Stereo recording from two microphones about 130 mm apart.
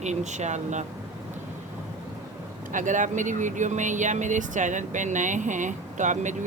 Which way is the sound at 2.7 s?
75° right (ahead or behind).